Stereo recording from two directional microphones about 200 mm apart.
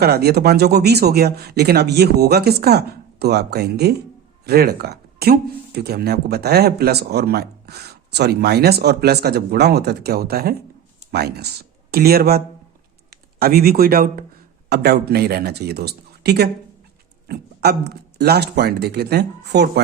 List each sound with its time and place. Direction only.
0.0 s speech: 50° right (ahead or behind)